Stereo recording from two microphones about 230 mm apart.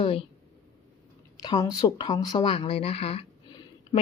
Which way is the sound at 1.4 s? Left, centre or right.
Centre.